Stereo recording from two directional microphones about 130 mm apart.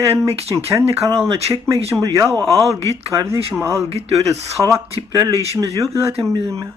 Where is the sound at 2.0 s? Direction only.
25° right (ahead or behind).